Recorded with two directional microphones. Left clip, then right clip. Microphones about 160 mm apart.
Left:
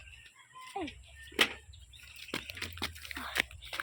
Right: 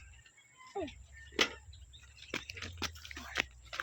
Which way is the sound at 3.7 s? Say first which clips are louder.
Left 2 dB; 90° left.